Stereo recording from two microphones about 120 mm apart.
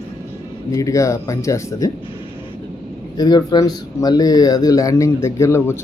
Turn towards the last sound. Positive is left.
turn(degrees=20)  # may be behind; listen again after turning